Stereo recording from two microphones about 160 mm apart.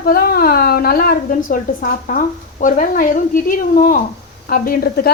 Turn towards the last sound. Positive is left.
turn(degrees=70)  # may be behind; listen again after turning